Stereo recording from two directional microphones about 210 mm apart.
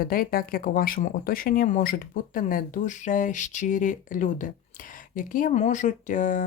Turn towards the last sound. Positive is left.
turn(degrees=40)  # may be behind; listen again after turning